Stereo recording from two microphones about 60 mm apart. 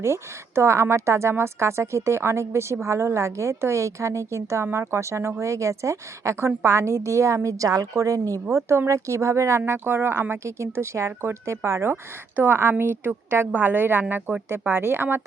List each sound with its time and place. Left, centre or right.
0.0 s a woman's voice: right
8.9 s a woman's voice: right
12.4 s a woman's voice: right